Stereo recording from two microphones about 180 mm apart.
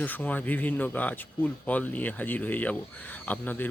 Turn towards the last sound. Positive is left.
turn(degrees=10)  # may be behind; listen again after turning